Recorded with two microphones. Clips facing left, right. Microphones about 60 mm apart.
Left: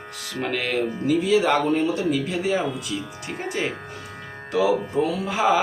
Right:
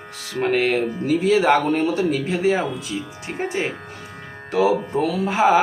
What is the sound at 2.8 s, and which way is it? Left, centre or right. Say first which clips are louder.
Speech: right 1 dB; right.